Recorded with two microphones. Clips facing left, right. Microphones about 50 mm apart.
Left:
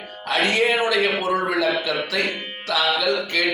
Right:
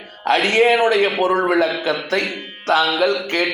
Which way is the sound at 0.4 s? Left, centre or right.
Right.